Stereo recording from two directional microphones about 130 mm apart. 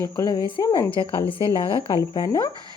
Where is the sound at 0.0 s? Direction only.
30° left (ahead or behind).